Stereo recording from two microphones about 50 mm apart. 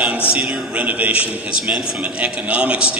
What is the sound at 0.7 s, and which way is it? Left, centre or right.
Speech, right.